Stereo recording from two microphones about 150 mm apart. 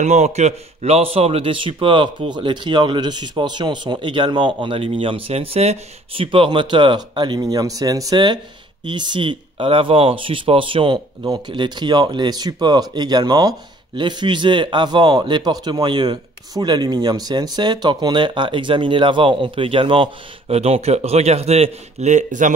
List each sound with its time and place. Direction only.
0.0 s speech: 50° right (ahead or behind)